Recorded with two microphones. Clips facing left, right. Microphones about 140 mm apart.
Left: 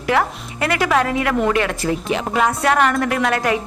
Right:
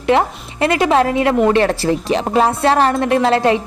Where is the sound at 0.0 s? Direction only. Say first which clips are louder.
Right 4 dB; 25° right (ahead or behind).